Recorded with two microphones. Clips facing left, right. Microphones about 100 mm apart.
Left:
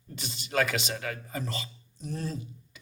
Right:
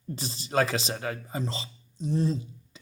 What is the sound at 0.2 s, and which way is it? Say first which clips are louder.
Speech: right 2 dB; 35° right (ahead or behind).